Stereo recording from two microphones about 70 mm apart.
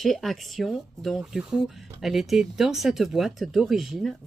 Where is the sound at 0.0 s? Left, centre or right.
Centre.